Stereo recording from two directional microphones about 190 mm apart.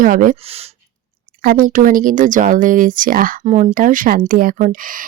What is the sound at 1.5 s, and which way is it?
Speech, 45° right (ahead or behind).